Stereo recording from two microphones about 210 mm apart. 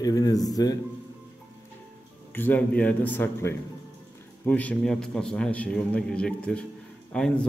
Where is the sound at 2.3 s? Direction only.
10° left (ahead or behind).